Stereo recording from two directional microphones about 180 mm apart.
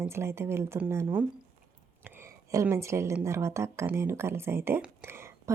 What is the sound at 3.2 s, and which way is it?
Speech, 15° right (ahead or behind).